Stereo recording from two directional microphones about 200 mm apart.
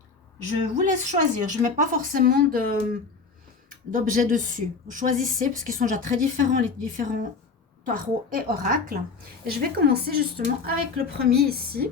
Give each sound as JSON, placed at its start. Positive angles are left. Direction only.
{"t": 0.6, "sound": "a woman's voice", "side_deg": -35}